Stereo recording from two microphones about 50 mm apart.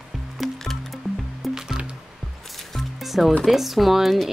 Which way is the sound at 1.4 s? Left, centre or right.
Centre.